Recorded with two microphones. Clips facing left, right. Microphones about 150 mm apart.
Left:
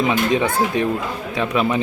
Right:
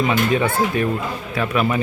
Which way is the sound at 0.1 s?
15° left (ahead or behind).